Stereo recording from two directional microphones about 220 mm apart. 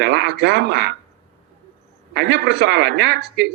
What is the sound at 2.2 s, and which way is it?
Speech, 50° right (ahead or behind).